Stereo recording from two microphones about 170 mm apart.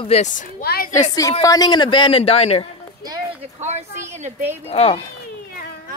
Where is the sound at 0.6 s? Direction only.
65° left (ahead or behind).